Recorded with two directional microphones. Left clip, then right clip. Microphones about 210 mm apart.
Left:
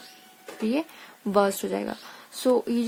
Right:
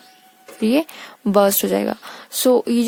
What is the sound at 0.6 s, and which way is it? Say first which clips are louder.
Speech: right 9 dB; 50° right (ahead or behind).